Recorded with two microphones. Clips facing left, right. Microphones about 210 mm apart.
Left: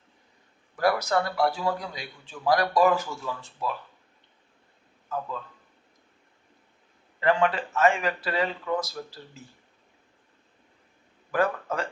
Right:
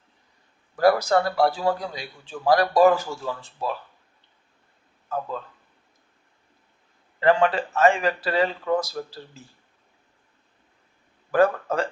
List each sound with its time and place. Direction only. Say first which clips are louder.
0.8 s a man's voice: right 5 dB; 30° right (ahead or behind)
5.0 s speech: right 3 dB; 40° right (ahead or behind)
7.2 s a man's voice: right 4 dB; 35° right (ahead or behind)
11.3 s a man's voice: right 6 dB; 35° right (ahead or behind)